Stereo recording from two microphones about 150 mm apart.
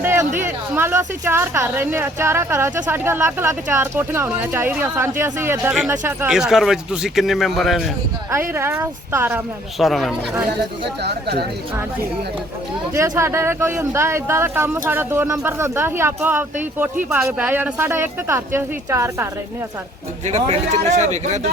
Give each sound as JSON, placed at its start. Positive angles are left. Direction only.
{"t": 0.0, "sound": "a sound", "side_deg": -15}
{"t": 0.3, "sound": "a man's voice", "side_deg": -15}
{"t": 8.3, "sound": "speech", "side_deg": -15}
{"t": 9.7, "sound": "a man's voice", "side_deg": 0}
{"t": 11.0, "sound": "speech", "side_deg": -90}
{"t": 12.9, "sound": "speech", "side_deg": -20}
{"t": 20.2, "sound": "speech", "side_deg": -50}